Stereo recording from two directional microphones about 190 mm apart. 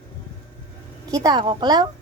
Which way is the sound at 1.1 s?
20° right (ahead or behind).